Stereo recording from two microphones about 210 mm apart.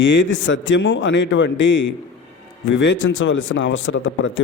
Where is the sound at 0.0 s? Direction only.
60° left (ahead or behind).